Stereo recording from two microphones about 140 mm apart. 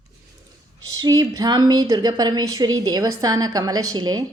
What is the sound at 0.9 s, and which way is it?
A woman's voice, 25° right (ahead or behind).